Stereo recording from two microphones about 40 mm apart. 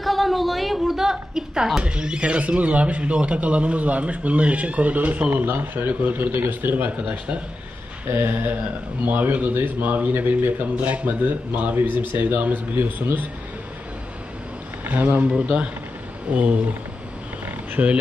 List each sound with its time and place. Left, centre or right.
0.0 s a sound: centre
1.8 s speech: right
6.9 s speech: right
11.7 s speech: right
14.9 s speech: right
15.3 s speech: right
16.3 s speech: right
17.8 s speech: right